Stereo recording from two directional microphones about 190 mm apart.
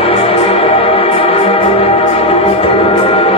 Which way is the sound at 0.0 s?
30° left (ahead or behind).